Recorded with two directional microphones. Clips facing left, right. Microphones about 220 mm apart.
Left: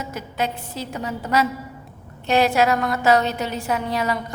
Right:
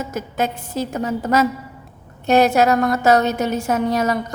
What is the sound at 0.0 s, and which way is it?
A woman's voice, 45° right (ahead or behind).